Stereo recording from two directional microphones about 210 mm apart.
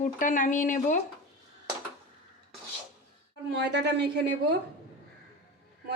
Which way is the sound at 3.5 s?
55° right (ahead or behind).